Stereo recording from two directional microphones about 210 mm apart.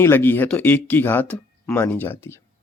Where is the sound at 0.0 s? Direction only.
10° left (ahead or behind).